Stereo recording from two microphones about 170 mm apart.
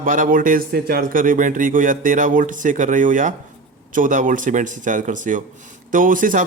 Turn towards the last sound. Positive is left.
turn(degrees=-50)  # may be behind; listen again after turning